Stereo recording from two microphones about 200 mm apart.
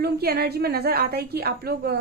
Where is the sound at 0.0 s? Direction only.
50° right (ahead or behind).